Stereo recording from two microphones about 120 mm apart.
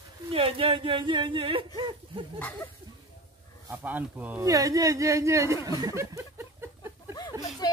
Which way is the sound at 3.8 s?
15° right (ahead or behind).